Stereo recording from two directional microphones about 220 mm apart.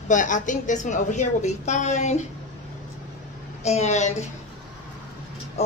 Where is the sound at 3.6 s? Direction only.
30° left (ahead or behind).